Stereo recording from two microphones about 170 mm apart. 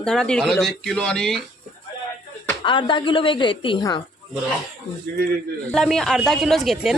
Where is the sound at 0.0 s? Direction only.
5° left (ahead or behind).